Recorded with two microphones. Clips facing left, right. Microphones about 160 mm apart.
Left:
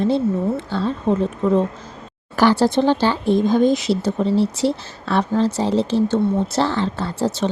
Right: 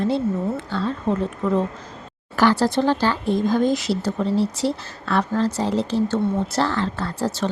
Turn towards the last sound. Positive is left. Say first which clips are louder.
# left 3 dB
turn(degrees=25)  # may be behind; listen again after turning